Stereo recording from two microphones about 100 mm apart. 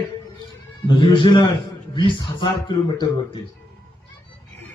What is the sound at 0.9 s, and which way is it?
Speech, 60° left (ahead or behind).